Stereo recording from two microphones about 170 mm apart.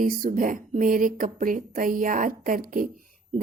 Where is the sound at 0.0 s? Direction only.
55° right (ahead or behind).